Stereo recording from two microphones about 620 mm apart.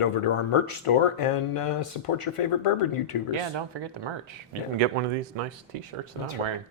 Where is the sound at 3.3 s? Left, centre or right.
Right.